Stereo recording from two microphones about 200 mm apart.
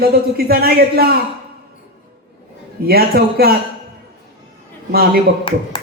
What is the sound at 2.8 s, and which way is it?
Speech, 50° right (ahead or behind).